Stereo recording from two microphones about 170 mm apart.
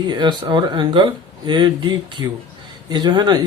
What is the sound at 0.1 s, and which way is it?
Speech, 25° right (ahead or behind).